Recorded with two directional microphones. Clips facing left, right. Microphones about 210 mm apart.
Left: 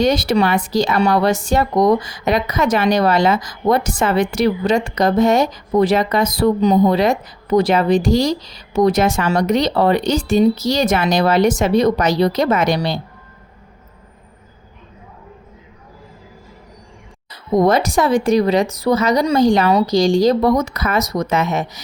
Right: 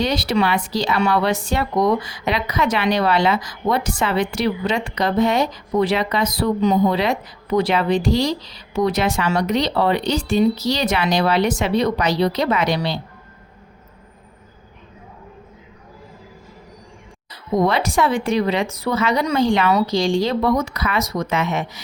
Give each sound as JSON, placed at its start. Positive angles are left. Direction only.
{"t": 0.0, "sound": "speech", "side_deg": 45}
{"t": 17.6, "sound": "a woman's voice", "side_deg": 45}